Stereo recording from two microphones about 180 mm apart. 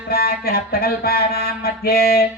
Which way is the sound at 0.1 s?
55° left (ahead or behind).